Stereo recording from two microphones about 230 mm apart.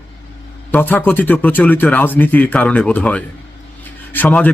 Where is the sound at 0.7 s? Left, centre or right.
Centre.